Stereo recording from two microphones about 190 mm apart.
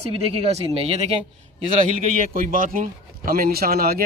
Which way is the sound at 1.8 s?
45° right (ahead or behind).